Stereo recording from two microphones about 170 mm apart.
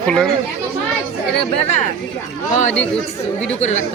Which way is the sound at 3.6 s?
40° left (ahead or behind).